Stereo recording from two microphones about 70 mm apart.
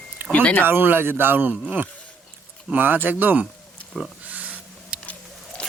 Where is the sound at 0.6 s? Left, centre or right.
Right.